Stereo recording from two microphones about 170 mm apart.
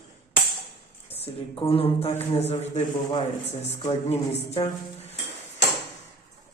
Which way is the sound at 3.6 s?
35° left (ahead or behind).